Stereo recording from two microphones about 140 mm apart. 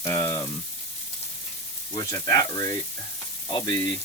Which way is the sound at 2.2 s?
25° left (ahead or behind).